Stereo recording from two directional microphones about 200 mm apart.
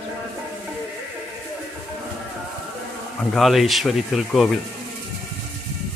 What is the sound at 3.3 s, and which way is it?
Speech, centre (ahead or behind).